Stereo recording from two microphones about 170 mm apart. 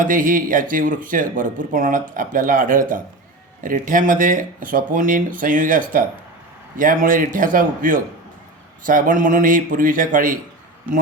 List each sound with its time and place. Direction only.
0.0 s speech: 50° right (ahead or behind)